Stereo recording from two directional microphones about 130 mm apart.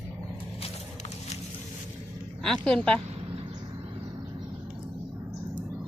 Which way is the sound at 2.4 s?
5° left (ahead or behind).